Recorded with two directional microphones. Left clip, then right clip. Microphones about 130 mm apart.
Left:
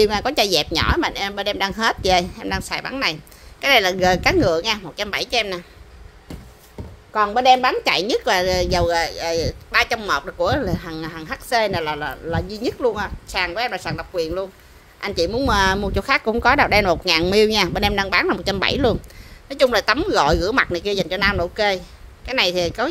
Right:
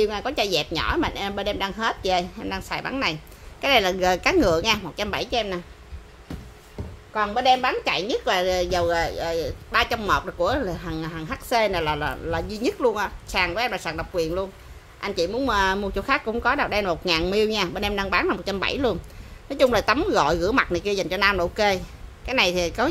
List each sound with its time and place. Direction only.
0.0 s a woman's voice: 40° left (ahead or behind); by 5.2 s 25° left (ahead or behind)
5.2 s a woman's voice: 45° left (ahead or behind)
7.2 s a woman's voice: 55° left (ahead or behind); by 14.5 s 30° left (ahead or behind)
15.0 s a woman's voice: 40° left (ahead or behind); by 22.8 s 20° left (ahead or behind)